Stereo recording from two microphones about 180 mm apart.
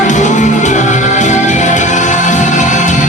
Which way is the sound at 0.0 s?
45° left (ahead or behind).